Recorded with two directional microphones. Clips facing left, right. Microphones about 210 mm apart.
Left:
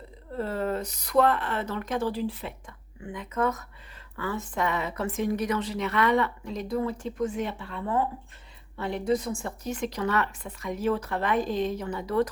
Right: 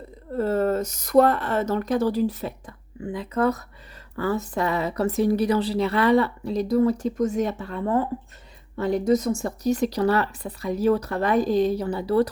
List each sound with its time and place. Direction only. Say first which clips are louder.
0.3 s speech: right 7 dB; 45° right (ahead or behind)